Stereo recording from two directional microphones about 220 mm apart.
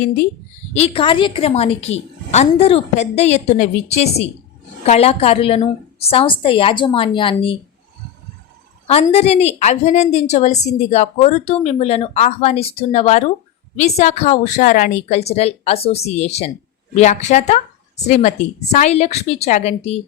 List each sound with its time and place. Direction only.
0.7 s a woman's voice: 25° left (ahead or behind)
8.9 s a woman's voice: 25° left (ahead or behind)